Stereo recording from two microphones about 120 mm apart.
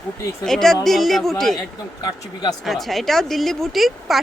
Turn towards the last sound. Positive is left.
turn(degrees=0)  # may be behind; listen again after turning